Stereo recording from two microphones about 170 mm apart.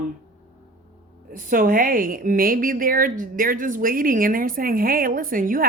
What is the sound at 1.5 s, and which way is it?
A woman's voice, 55° right (ahead or behind).